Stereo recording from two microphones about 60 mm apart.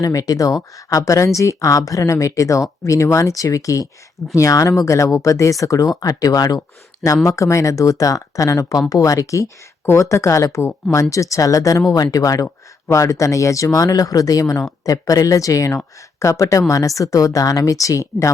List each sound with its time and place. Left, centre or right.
0.0 s speech: left
7.3 s speech: left
9.8 s speech: left
12.9 s speech: left